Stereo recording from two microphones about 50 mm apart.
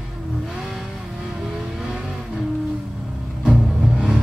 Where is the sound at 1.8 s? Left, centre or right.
Centre.